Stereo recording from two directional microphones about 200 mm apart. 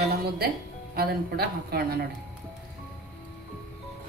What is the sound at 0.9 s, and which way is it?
A woman's voice, 50° right (ahead or behind).